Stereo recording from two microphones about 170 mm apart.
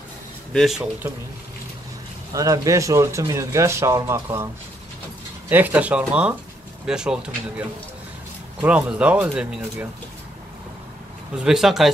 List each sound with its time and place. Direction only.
0.5 s speech: centre (ahead or behind)
2.3 s speech: 20° right (ahead or behind)
5.5 s speech: 10° right (ahead or behind)
11.3 s speech: 5° right (ahead or behind)